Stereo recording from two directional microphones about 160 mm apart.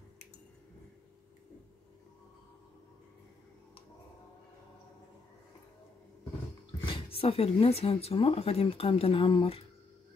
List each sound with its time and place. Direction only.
6.8 s speech: 35° left (ahead or behind)